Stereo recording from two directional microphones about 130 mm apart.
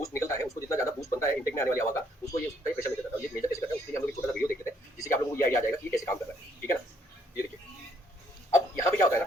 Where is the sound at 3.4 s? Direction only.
25° left (ahead or behind).